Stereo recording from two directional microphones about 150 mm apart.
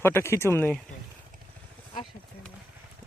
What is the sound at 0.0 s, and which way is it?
Speech, 15° left (ahead or behind).